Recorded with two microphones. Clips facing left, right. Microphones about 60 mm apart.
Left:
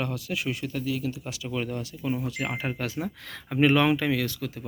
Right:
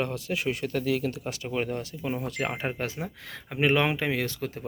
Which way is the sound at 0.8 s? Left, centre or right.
Right.